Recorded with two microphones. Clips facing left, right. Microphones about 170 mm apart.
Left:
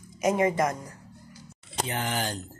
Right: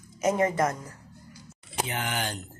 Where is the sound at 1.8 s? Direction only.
35° left (ahead or behind).